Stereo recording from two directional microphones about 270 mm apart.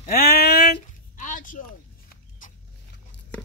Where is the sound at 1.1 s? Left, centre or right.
Left.